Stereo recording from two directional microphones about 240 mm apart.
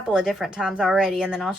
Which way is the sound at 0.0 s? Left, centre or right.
Centre.